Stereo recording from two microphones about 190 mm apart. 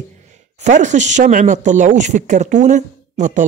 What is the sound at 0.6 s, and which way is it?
Speech, 40° right (ahead or behind).